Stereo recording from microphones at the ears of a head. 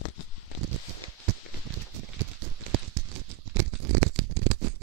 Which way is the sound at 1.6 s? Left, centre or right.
Right.